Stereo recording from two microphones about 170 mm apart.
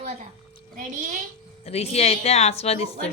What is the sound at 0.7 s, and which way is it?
Speech, 55° right (ahead or behind).